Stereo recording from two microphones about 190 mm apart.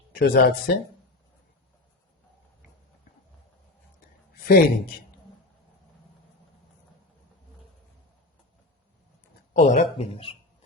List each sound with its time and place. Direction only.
0.1 s speech: 55° left (ahead or behind)
4.4 s a man's voice: 55° left (ahead or behind)
9.5 s speech: 40° left (ahead or behind)